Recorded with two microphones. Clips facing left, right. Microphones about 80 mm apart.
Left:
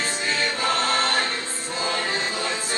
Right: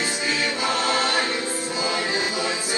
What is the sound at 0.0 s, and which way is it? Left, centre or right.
Music, centre.